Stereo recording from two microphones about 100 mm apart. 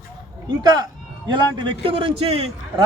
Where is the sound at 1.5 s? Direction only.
60° right (ahead or behind); by 2.5 s 75° right (ahead or behind).